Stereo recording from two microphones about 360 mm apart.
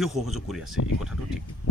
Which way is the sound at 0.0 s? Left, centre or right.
Centre.